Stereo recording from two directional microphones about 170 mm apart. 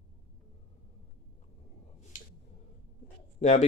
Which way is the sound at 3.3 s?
40° left (ahead or behind).